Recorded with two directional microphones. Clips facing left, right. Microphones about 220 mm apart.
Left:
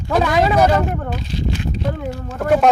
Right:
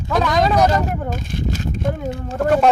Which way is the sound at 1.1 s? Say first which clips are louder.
Even; 45° right (ahead or behind).